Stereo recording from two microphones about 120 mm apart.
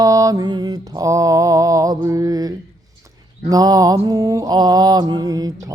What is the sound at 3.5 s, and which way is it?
Mantra, 30° right (ahead or behind).